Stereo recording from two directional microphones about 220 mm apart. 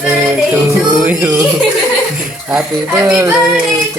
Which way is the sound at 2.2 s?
5° right (ahead or behind).